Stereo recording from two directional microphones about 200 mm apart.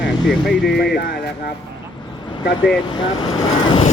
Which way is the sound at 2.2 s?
20° left (ahead or behind).